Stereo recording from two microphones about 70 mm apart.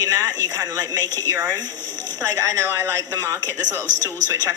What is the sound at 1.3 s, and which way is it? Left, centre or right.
Speech, right.